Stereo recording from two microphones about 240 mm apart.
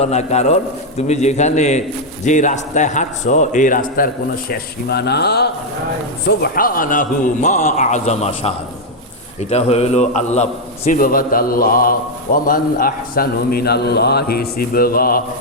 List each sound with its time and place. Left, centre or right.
0.0 s a man's voice: left